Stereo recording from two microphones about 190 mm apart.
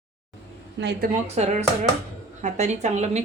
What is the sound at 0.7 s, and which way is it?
Speech, 65° right (ahead or behind).